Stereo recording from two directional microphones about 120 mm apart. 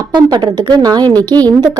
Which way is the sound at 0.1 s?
35° right (ahead or behind).